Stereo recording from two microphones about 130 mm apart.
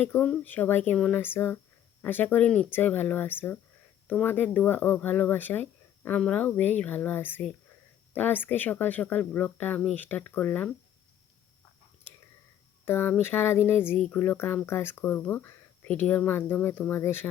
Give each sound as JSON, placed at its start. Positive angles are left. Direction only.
{"t": 0.0, "sound": "speech", "side_deg": 15}
{"t": 12.8, "sound": "speech", "side_deg": 15}